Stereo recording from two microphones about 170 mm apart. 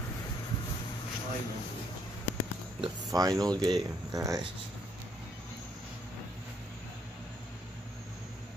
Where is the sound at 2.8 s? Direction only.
20° right (ahead or behind).